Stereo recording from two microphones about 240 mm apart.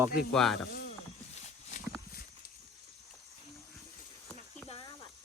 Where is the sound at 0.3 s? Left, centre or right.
Centre.